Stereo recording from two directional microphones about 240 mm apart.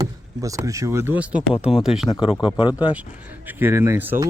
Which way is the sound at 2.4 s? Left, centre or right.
Left.